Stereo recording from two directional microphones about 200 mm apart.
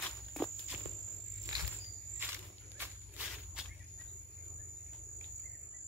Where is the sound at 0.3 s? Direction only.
Centre (ahead or behind).